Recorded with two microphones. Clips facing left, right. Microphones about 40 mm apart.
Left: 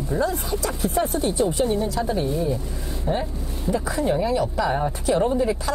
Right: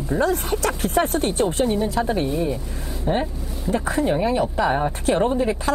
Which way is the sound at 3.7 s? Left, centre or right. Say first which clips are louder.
Right 3 dB; right.